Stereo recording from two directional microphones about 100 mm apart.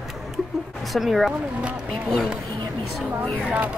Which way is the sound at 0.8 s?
Centre (ahead or behind).